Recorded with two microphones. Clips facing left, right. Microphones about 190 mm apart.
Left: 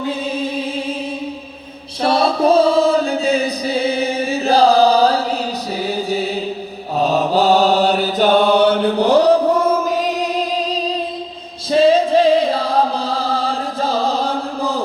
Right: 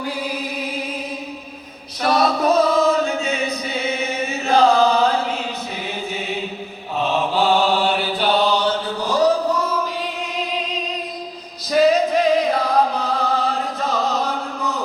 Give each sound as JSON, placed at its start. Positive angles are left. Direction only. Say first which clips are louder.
{"t": 0.0, "sound": "music", "louder": "left 5 dB", "side_deg": 25}
{"t": 2.0, "sound": "chant", "louder": "left 3 dB", "side_deg": 30}
{"t": 5.8, "sound": "mantra", "louder": "left 10 dB", "side_deg": 35}
{"t": 9.8, "sound": "music", "louder": "left 8 dB", "side_deg": 45}
{"t": 11.7, "sound": "music", "louder": "left 3 dB", "side_deg": 30}